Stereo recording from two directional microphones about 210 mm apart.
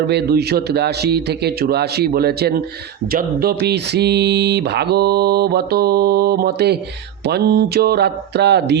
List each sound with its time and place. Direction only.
0.1 s speech: 50° right (ahead or behind)